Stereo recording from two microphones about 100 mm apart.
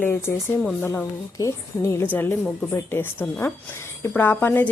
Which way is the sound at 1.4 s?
30° left (ahead or behind).